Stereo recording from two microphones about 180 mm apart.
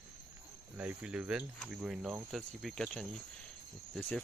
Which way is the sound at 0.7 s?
5° right (ahead or behind).